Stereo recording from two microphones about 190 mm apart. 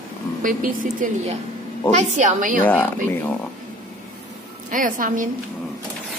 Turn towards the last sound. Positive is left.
turn(degrees=-45)  # may be behind; listen again after turning